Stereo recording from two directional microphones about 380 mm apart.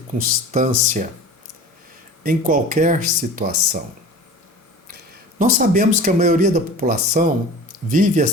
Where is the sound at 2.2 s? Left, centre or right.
Right.